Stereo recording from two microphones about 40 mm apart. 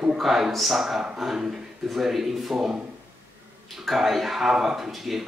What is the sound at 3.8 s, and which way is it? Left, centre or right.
A man's voice, centre.